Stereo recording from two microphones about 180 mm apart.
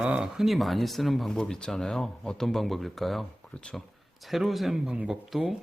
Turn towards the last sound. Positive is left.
turn(degrees=0)  # may be behind; listen again after turning